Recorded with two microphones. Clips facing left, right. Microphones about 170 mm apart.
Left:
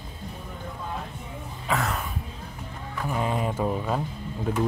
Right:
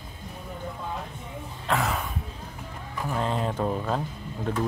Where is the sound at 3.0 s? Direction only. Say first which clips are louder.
Left 1 dB; 5° left (ahead or behind).